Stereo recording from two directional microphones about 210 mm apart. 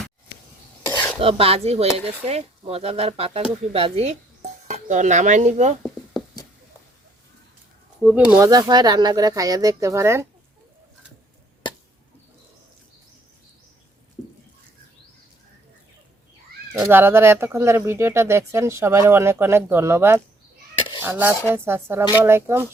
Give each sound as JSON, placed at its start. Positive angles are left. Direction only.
{"t": 0.9, "sound": "dishes", "side_deg": 10}
{"t": 1.2, "sound": "speech", "side_deg": -25}
{"t": 8.0, "sound": "speech", "side_deg": -10}
{"t": 16.8, "sound": "speech", "side_deg": -10}